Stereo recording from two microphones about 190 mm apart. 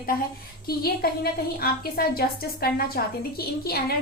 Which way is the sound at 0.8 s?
55° left (ahead or behind).